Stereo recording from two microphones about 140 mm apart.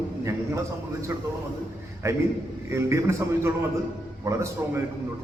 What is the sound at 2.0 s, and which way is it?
A man's voice, 20° right (ahead or behind).